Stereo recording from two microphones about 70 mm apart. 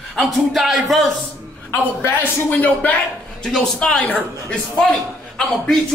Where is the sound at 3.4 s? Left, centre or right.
Centre.